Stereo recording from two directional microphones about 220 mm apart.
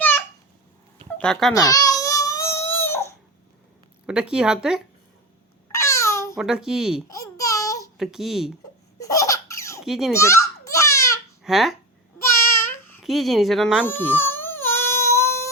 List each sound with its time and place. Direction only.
1.2 s speech: centre (ahead or behind)
1.5 s baby cry: 15° left (ahead or behind)
4.0 s speech: 5° right (ahead or behind)
5.7 s babbling: 15° left (ahead or behind)
6.3 s speech: centre (ahead or behind)
7.1 s a sound: 15° left (ahead or behind)
7.9 s speech: centre (ahead or behind)
9.0 s laughter: 15° left (ahead or behind)
9.8 s a child's voice: centre (ahead or behind)
10.1 s a sound: 15° left (ahead or behind)
11.4 s speech: centre (ahead or behind)
12.2 s babbling: 10° left (ahead or behind)
13.1 s speech: centre (ahead or behind)
13.8 s baby cry: 10° left (ahead or behind)